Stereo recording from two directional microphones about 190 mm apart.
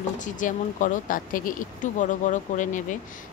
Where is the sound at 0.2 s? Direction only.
40° left (ahead or behind).